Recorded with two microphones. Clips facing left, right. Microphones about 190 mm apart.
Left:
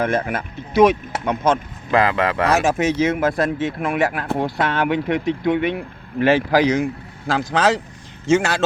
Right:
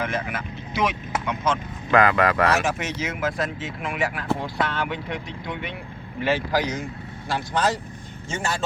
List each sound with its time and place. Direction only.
0.0 s speech: 50° left (ahead or behind)
1.9 s speech: 25° left (ahead or behind)
2.5 s speech: 50° left (ahead or behind); by 5.7 s 65° left (ahead or behind)
6.1 s a man's voice: 80° left